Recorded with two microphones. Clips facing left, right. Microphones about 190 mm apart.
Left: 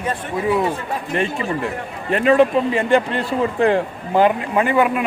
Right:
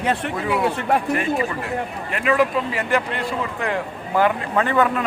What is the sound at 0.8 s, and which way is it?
Speech, 70° right (ahead or behind).